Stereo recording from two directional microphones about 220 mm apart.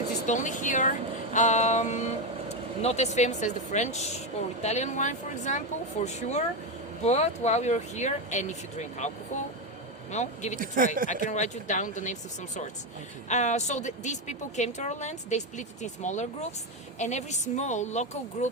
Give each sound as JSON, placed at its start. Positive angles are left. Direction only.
{"t": 0.3, "sound": "a woman's voice", "side_deg": 35}
{"t": 10.6, "sound": "speech", "side_deg": -40}
{"t": 11.3, "sound": "a woman's voice", "side_deg": 35}